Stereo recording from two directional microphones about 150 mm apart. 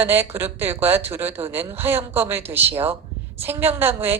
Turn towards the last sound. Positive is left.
turn(degrees=-15)  # may be behind; listen again after turning